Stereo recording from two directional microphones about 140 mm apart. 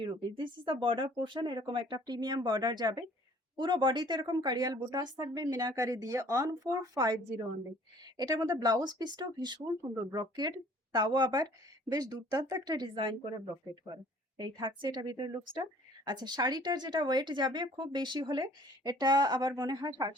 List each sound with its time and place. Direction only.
0.0 s speech: 35° right (ahead or behind)
14.3 s speech: 35° right (ahead or behind)